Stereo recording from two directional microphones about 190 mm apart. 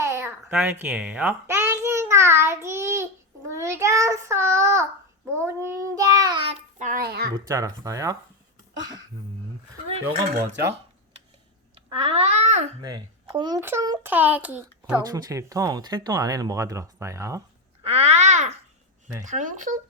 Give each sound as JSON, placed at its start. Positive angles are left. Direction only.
{"t": 0.0, "sound": "a sound", "side_deg": -15}
{"t": 5.3, "sound": "child singing", "side_deg": -15}
{"t": 6.7, "sound": "a sound", "side_deg": -45}
{"t": 7.3, "sound": "speech", "side_deg": -15}
{"t": 11.9, "sound": "speech", "side_deg": -30}
{"t": 12.8, "sound": "a child's voice", "side_deg": -20}
{"t": 14.9, "sound": "speech", "side_deg": -20}
{"t": 17.8, "sound": "babbling", "side_deg": -35}